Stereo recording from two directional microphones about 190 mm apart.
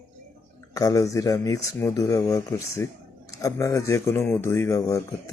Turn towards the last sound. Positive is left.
turn(degrees=15)  # may be behind; listen again after turning